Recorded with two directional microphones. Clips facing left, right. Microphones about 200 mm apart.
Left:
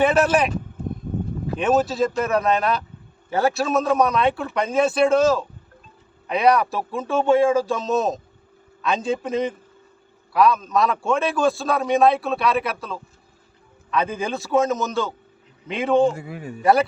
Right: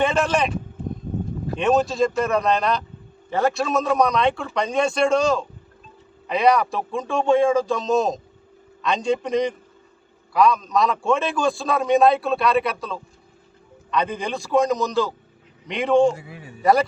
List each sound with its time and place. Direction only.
0.0 s a man's voice: 5° left (ahead or behind)
1.5 s a man's voice: centre (ahead or behind)
16.1 s a man's voice: 50° left (ahead or behind)